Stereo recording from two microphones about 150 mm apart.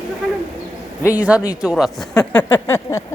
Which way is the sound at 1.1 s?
10° right (ahead or behind).